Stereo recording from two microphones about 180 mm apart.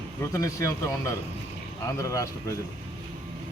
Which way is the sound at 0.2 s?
15° left (ahead or behind).